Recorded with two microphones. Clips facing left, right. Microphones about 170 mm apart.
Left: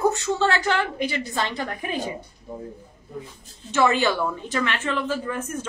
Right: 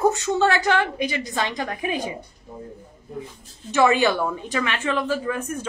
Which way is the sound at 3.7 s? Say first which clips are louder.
Right 2 dB; 15° right (ahead or behind).